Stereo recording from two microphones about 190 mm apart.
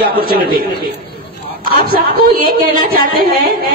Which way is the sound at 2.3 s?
50° right (ahead or behind).